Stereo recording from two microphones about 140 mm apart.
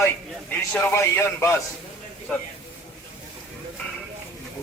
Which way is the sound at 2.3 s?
Centre (ahead or behind).